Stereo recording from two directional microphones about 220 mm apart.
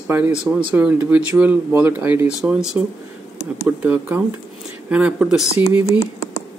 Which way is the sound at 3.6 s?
5° right (ahead or behind).